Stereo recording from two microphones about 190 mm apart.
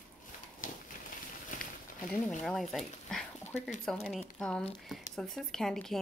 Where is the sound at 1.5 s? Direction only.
45° left (ahead or behind).